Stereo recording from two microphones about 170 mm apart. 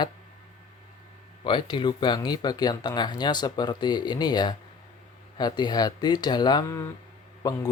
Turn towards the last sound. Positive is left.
turn(degrees=20)  # may be behind; listen again after turning